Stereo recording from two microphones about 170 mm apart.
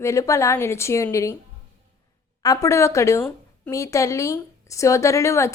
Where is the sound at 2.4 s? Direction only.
20° left (ahead or behind).